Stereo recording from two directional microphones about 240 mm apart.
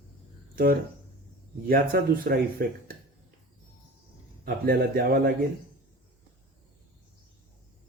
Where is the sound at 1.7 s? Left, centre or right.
Right.